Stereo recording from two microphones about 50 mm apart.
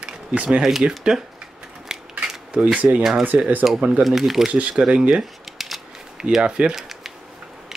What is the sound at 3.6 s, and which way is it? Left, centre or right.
Speech, centre.